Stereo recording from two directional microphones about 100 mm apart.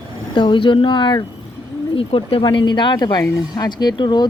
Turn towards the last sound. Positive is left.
turn(degrees=50)  # may be behind; listen again after turning